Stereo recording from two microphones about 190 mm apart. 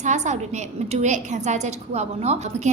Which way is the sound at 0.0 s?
40° right (ahead or behind).